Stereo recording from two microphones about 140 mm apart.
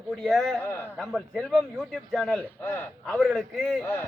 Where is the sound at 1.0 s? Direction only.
Centre (ahead or behind).